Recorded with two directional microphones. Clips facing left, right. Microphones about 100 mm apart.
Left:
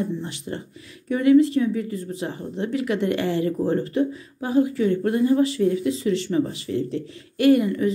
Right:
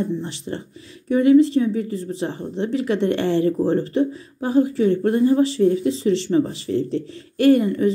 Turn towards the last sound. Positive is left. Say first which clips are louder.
# right 2 dB
turn(degrees=-35)  # may be behind; listen again after turning